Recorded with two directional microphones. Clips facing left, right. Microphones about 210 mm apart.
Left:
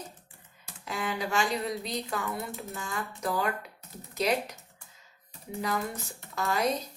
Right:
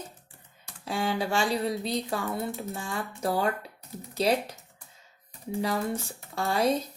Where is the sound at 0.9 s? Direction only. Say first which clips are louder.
Right 4 dB; 30° right (ahead or behind).